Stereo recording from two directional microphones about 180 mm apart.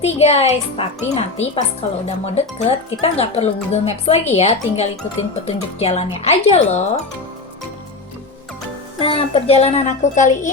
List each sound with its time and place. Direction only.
0.0 s speech: 35° left (ahead or behind)
9.0 s speech: 30° left (ahead or behind)